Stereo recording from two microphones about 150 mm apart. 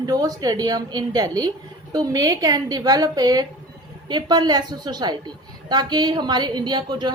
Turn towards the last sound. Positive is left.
turn(degrees=-30)  # may be behind; listen again after turning